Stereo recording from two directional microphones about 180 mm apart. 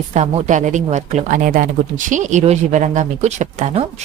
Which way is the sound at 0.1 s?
40° right (ahead or behind).